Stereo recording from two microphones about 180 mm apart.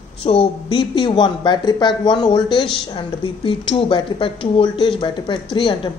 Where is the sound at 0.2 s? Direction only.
30° left (ahead or behind).